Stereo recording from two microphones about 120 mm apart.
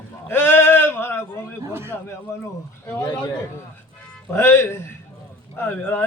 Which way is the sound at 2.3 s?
25° left (ahead or behind).